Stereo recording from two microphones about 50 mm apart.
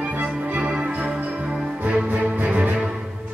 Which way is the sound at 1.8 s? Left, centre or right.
Right.